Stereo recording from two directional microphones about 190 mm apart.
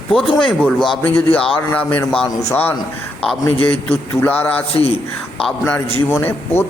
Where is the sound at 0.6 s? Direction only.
Centre (ahead or behind).